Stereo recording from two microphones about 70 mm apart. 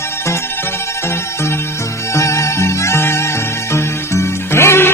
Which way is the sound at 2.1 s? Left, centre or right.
Left.